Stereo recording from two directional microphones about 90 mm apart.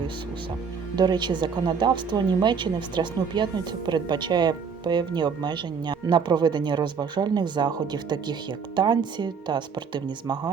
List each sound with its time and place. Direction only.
0.9 s speech: 55° right (ahead or behind)